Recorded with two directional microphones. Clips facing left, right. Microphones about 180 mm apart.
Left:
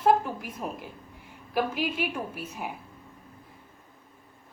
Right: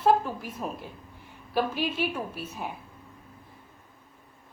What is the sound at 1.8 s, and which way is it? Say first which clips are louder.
Speech: right 1 dB; 15° left (ahead or behind).